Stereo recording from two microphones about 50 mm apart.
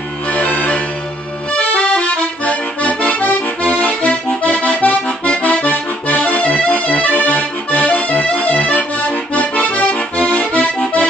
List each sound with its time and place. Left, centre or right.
0.3 s music: left
1.5 s accordion: left